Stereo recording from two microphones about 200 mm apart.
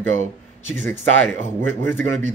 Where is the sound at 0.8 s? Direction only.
10° left (ahead or behind).